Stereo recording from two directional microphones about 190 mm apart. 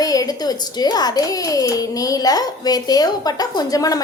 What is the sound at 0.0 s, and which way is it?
A child's voice, 20° left (ahead or behind).